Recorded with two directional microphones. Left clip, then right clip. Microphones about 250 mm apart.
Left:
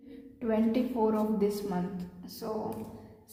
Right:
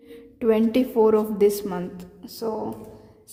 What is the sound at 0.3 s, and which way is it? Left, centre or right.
A woman's voice, right.